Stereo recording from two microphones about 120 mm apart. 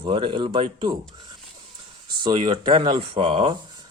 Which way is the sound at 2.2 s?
40° right (ahead or behind).